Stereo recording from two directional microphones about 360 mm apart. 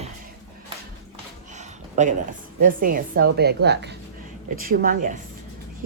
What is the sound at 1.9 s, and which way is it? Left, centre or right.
A woman's voice, centre.